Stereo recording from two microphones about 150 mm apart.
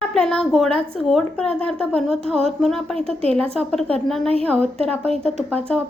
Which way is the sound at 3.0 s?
40° right (ahead or behind).